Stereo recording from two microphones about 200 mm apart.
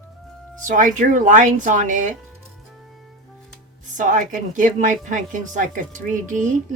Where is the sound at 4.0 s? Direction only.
40° right (ahead or behind).